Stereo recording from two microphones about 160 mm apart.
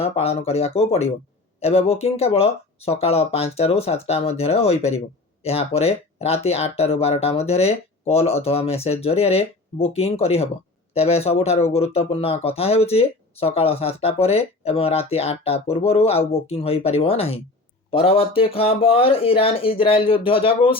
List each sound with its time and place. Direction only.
0.0 s speech: 40° left (ahead or behind)